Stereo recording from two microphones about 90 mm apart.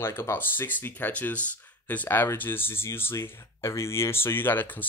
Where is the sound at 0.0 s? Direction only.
25° left (ahead or behind).